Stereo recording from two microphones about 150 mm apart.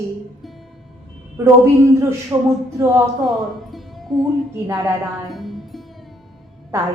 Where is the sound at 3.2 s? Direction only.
Centre (ahead or behind).